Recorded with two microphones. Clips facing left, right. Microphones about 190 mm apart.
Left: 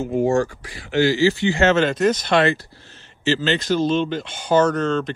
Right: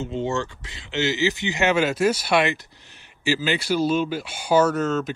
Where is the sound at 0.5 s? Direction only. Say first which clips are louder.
Left 7 dB; 25° right (ahead or behind).